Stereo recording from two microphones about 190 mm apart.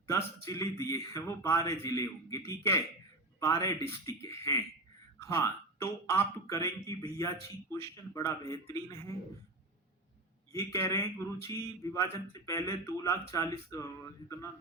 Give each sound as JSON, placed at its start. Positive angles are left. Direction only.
{"t": 0.4, "sound": "a man's voice", "side_deg": 15}
{"t": 10.5, "sound": "a man's voice", "side_deg": 15}